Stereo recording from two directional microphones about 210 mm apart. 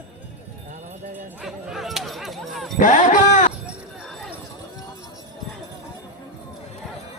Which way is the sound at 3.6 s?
Centre (ahead or behind).